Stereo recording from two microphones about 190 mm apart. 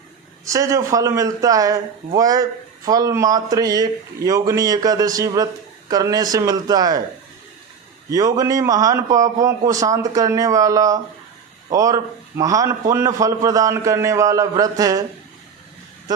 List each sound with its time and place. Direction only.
0.4 s a man's voice: 15° right (ahead or behind)
8.1 s a man's voice: 20° right (ahead or behind)